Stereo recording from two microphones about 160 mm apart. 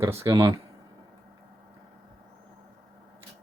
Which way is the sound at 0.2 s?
20° right (ahead or behind).